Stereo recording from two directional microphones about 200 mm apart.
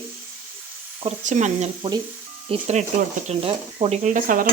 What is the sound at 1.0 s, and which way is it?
Dishes, 35° right (ahead or behind).